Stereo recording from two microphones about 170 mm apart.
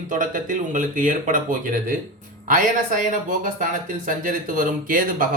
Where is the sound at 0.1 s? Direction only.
50° right (ahead or behind).